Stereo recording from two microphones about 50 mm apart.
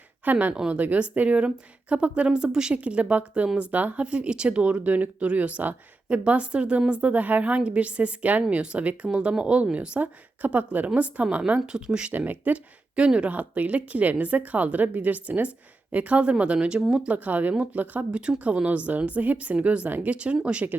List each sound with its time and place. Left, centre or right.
0.3 s a woman's voice: right; by 2.7 s centre
2.7 s a woman's voice: right
11.6 s speech: centre
12.1 s speech: right
13.0 s a woman's voice: right
13.3 s a woman's voice: right
17.2 s a woman's voice: right